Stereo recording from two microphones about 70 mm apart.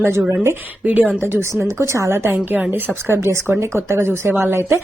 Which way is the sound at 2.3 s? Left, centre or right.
Right.